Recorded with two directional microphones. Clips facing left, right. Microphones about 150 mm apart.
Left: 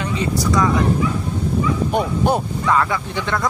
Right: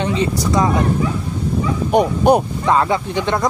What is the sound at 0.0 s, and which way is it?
Speech, 25° right (ahead or behind).